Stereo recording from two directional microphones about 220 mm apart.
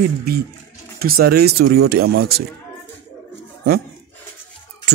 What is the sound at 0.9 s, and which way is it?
Speech, 45° right (ahead or behind).